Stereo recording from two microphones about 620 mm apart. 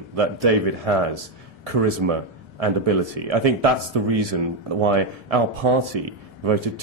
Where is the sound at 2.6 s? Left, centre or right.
Right.